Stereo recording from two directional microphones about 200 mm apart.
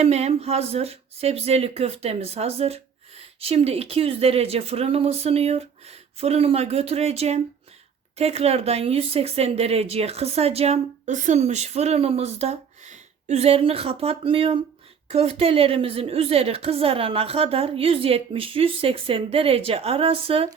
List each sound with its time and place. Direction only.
0.0 s a woman's voice: 30° right (ahead or behind)